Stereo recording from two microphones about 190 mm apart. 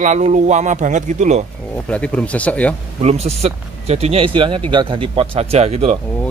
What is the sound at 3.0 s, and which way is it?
Speech, 35° right (ahead or behind).